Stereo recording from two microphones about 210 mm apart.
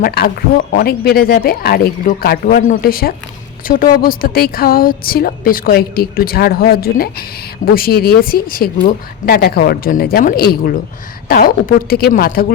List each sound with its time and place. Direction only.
0.0 s a woman's voice: 50° left (ahead or behind)